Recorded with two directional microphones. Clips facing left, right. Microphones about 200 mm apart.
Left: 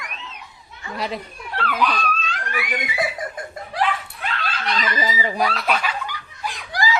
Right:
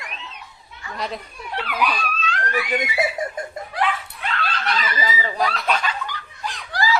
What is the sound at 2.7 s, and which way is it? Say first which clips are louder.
Laughter: right 2 dB; 25° right (ahead or behind).